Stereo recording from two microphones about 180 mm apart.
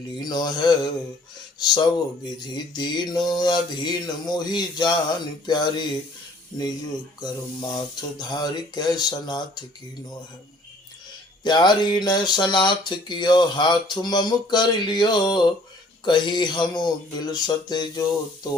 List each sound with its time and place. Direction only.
0.2 s speech: 20° left (ahead or behind)
7.2 s speech: 20° left (ahead or behind)
11.4 s speech: 25° left (ahead or behind)